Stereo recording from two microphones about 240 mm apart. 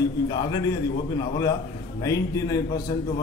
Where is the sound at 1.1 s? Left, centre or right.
Centre.